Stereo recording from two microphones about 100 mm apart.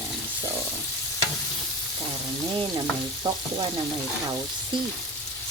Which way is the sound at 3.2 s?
50° right (ahead or behind).